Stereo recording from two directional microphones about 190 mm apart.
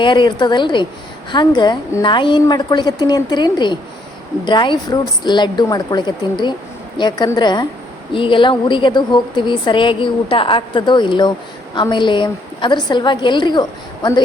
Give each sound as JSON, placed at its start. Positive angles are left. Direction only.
{"t": 0.0, "sound": "a woman's voice", "side_deg": 25}